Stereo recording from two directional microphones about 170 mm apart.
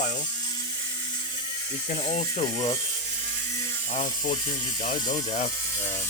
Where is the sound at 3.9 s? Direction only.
45° left (ahead or behind).